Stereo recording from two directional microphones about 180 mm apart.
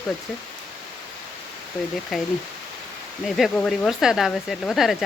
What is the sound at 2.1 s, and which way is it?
Speech, centre (ahead or behind).